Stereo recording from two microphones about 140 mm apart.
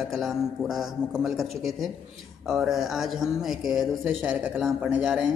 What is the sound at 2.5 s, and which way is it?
A man's voice, 5° right (ahead or behind).